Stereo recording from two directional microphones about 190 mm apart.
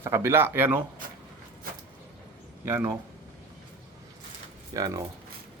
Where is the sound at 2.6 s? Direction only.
15° right (ahead or behind).